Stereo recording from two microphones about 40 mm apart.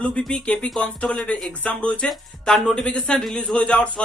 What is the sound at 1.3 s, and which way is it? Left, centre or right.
Speech, left.